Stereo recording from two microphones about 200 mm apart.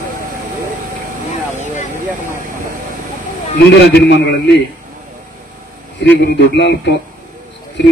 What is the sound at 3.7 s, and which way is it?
Speech, 55° left (ahead or behind).